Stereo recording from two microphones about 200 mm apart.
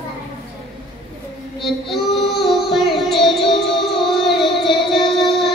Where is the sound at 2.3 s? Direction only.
Centre (ahead or behind).